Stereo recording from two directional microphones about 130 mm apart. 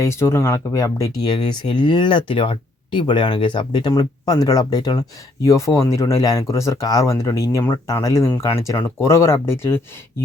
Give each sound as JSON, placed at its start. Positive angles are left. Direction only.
{"t": 0.0, "sound": "speech", "side_deg": 20}